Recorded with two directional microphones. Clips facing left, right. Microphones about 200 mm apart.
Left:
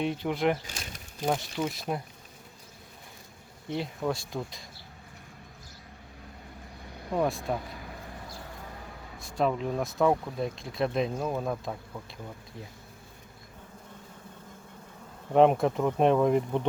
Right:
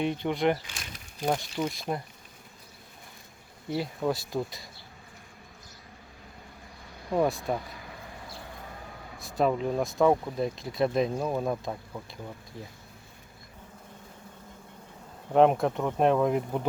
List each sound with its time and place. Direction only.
0.0 s speech: centre (ahead or behind)
0.6 s a sound: 40° left (ahead or behind)
1.6 s speech: 5° left (ahead or behind)
3.7 s speech: 5° right (ahead or behind)
7.1 s speech: 5° right (ahead or behind)
9.1 s speech: centre (ahead or behind)
15.3 s speech: centre (ahead or behind)